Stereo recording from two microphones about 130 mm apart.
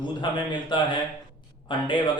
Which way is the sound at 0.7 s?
35° left (ahead or behind).